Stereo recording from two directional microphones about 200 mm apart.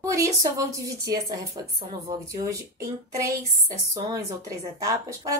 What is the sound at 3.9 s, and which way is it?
A woman's voice, 15° right (ahead or behind).